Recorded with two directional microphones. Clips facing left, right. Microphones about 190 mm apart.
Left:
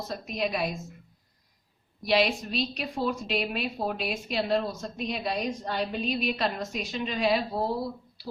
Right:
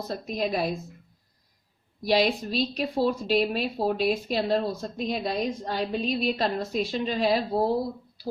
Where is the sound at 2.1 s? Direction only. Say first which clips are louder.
Right 2 dB; 35° right (ahead or behind).